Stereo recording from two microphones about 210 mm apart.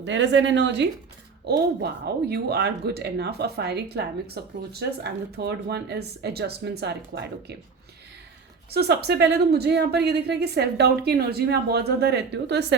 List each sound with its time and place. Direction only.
0.0 s a woman's voice: 60° right (ahead or behind)
8.7 s a woman's voice: 50° right (ahead or behind)